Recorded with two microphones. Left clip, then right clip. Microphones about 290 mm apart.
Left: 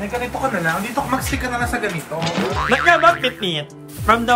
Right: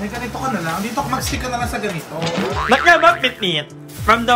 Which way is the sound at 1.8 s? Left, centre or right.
Centre.